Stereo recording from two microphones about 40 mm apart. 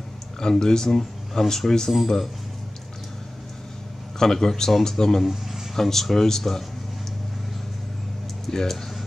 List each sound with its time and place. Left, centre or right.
0.4 s speech: centre
4.2 s speech: centre
5.2 s speech: centre
5.8 s speech: centre
8.5 s speech: centre